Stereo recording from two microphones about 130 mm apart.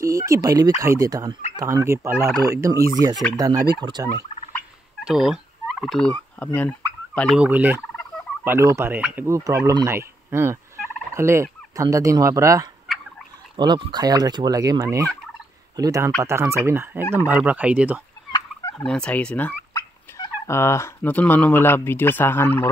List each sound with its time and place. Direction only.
0.0 s speech: 25° right (ahead or behind)
3.8 s fowl: 35° right (ahead or behind)
5.0 s fowl: 5° right (ahead or behind)
7.3 s speech: 10° right (ahead or behind)
13.6 s fowl: 35° right (ahead or behind)
15.7 s speech: 25° right (ahead or behind); by 18.0 s 10° right (ahead or behind)
18.3 s fowl: 30° left (ahead or behind)
18.9 s turkey: 10° left (ahead or behind)
19.7 s turkey: 20° left (ahead or behind)